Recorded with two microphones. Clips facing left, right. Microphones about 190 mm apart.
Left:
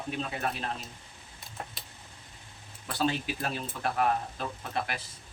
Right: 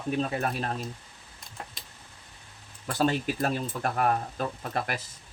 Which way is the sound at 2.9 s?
45° right (ahead or behind).